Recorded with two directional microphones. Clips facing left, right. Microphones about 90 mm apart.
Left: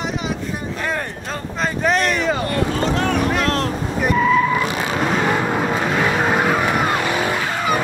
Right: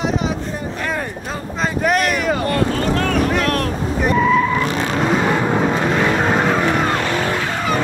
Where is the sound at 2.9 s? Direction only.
20° left (ahead or behind).